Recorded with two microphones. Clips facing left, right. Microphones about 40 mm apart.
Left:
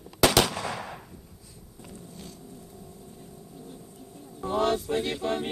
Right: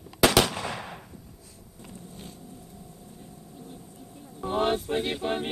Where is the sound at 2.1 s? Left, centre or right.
Right.